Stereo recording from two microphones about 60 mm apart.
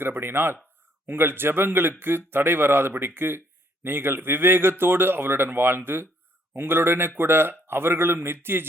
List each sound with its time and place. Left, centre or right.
0.0 s speech: right